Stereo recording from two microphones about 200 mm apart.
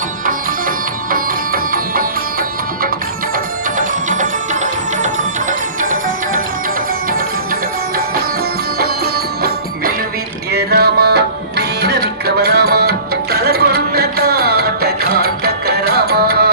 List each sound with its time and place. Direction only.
1.1 s music: 45° right (ahead or behind)
3.3 s music: 40° right (ahead or behind)
8.8 s music: 50° right (ahead or behind)